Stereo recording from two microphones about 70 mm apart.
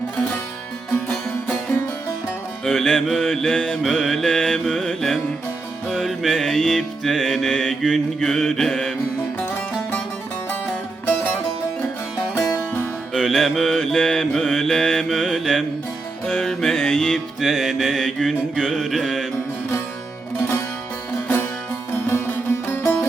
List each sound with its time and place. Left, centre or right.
2.6 s music: centre
11.0 s music: left
13.1 s music: centre
21.9 s music: left